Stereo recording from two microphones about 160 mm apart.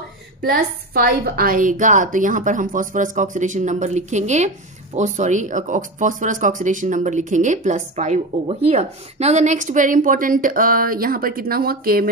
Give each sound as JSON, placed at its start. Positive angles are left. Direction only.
{"t": 0.5, "sound": "speech", "side_deg": -70}